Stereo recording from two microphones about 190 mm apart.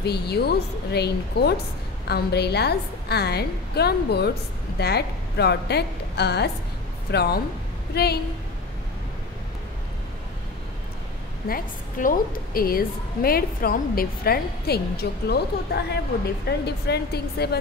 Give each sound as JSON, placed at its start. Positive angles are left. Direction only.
{"t": 0.0, "sound": "a woman's voice", "side_deg": 60}
{"t": 11.4, "sound": "a woman's voice", "side_deg": 50}